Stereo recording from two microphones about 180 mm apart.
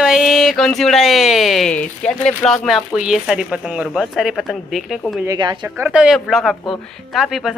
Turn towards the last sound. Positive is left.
turn(degrees=0)  # may be behind; listen again after turning